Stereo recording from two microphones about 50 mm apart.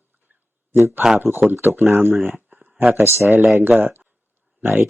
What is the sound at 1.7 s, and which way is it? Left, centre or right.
Speech, right.